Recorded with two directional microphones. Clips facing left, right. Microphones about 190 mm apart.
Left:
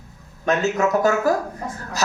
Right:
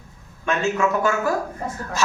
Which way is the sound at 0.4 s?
40° left (ahead or behind).